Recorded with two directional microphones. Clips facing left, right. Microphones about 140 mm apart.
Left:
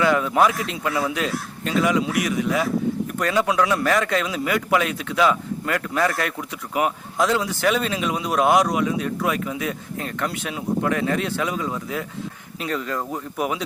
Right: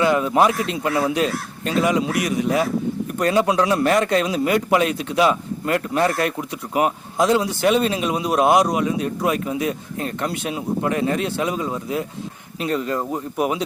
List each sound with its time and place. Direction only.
0.0 s a man's voice: 20° right (ahead or behind)